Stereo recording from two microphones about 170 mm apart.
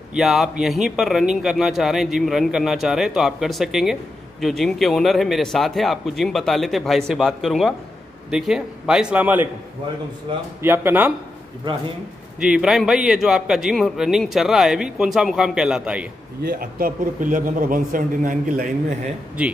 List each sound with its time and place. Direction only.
0.1 s a man's voice: centre (ahead or behind)
10.6 s speech: 15° right (ahead or behind)
12.4 s a man's voice: 5° right (ahead or behind)
16.4 s a man's voice: 60° right (ahead or behind)